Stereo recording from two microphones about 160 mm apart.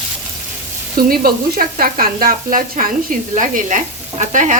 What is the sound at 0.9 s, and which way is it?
Frying, 65° right (ahead or behind).